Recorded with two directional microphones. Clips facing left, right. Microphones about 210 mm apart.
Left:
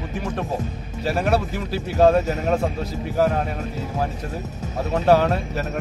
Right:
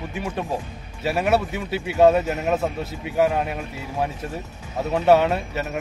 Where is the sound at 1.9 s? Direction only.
5° right (ahead or behind).